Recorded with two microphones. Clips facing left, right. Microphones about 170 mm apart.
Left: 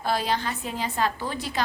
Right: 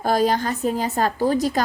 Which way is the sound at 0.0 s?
45° right (ahead or behind).